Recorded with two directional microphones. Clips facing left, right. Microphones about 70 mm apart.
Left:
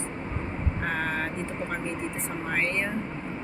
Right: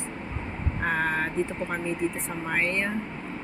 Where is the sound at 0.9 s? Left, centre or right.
Centre.